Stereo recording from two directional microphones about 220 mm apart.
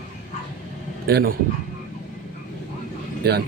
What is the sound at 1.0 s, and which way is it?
Speech, 45° right (ahead or behind).